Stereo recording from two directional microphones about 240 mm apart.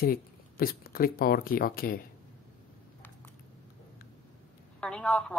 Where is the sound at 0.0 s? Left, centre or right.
Left.